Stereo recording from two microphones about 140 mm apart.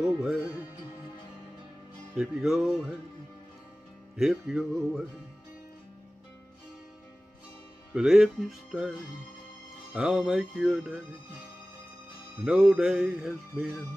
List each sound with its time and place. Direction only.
0.0 s music: centre (ahead or behind)
2.1 s music: centre (ahead or behind)
4.2 s music: 5° right (ahead or behind)
7.9 s music: 5° right (ahead or behind)
9.9 s music: 5° right (ahead or behind)
12.4 s music: 5° right (ahead or behind)